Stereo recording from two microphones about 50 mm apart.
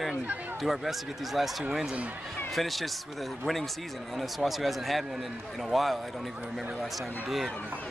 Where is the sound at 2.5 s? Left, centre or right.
Centre.